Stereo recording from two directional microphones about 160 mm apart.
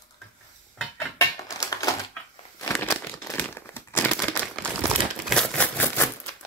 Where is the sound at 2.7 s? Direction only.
15° left (ahead or behind).